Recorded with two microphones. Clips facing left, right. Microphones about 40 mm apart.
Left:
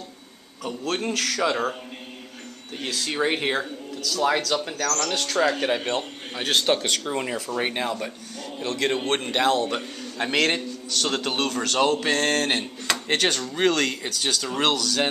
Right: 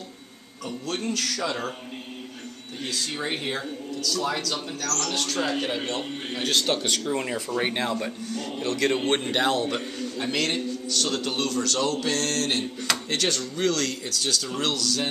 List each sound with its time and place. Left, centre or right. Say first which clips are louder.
0.7 s a man's voice: left 3 dB; left
3.1 s a man's voice: left 9 dB; left
5.0 s a man's voice: left 4 dB; left
5.9 s a man's voice: left 2 dB; left
6.8 s speech: even; centre
9.2 s speech: left 2 dB; centre
10.1 s a man's voice: left 5 dB; left
14.6 s a man's voice: left 6 dB; left